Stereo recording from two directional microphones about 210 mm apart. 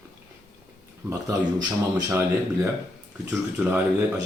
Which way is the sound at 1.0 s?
20° right (ahead or behind).